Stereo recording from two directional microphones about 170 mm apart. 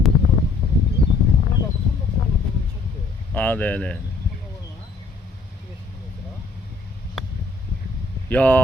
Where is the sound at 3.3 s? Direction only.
10° left (ahead or behind).